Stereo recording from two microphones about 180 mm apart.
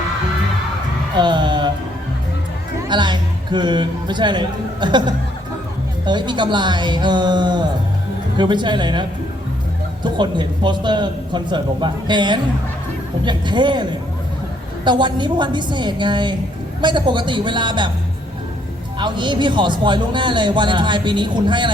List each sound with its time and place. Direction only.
1.1 s music: 25° right (ahead or behind)
2.9 s a man's voice: 25° right (ahead or behind)
14.8 s a man's voice: 25° right (ahead or behind)
18.9 s a man's voice: 25° right (ahead or behind)